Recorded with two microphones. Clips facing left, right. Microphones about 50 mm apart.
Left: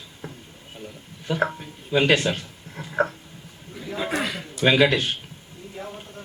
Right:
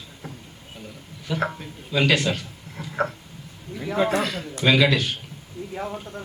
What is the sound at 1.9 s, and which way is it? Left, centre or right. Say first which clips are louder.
Speech: left 1 dB; left.